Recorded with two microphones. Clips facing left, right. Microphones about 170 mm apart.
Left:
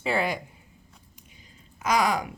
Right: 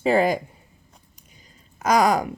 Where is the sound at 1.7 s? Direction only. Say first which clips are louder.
Right 5 dB; 40° right (ahead or behind).